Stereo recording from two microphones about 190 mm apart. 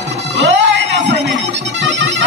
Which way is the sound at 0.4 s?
70° right (ahead or behind).